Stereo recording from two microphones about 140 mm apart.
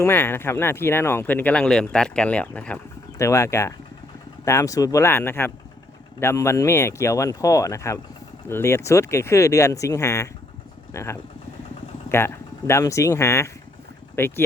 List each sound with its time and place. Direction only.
0.0 s speech: 15° left (ahead or behind)